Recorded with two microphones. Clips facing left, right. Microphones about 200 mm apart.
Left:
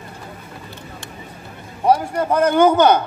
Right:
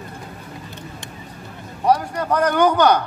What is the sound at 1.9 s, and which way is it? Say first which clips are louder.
A man's voice: left 2 dB; 25° left (ahead or behind).